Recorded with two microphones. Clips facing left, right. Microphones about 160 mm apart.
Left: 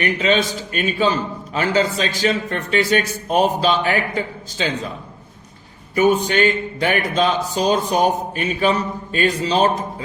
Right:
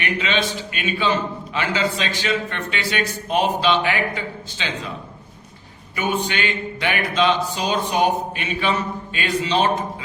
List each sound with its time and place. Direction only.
0.0 s a man's voice: 40° left (ahead or behind)
5.9 s a man's voice: 40° left (ahead or behind)